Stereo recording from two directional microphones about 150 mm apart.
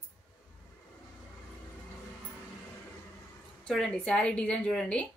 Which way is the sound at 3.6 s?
5° left (ahead or behind).